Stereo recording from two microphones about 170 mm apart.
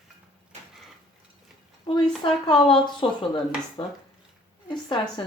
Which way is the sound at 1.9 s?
30° left (ahead or behind).